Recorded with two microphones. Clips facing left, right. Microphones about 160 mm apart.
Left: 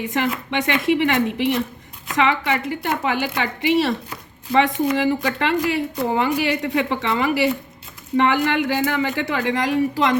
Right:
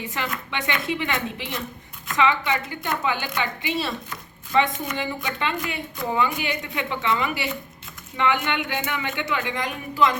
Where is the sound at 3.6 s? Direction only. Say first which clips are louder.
Left 13 dB; 70° left (ahead or behind).